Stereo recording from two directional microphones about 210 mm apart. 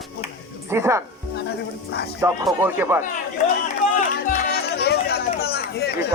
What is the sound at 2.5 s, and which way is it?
Speech, 10° right (ahead or behind).